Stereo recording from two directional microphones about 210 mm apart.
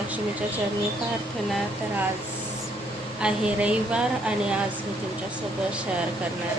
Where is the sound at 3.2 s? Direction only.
5° right (ahead or behind).